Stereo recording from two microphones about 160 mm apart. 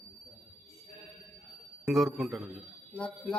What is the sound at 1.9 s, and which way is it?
Speech, centre (ahead or behind).